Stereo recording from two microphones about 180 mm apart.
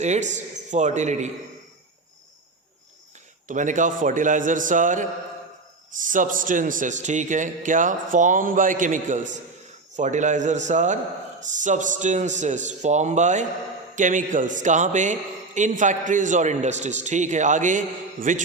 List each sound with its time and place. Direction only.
0.0 s a man's voice: 40° right (ahead or behind)
3.4 s a man's voice: 45° right (ahead or behind)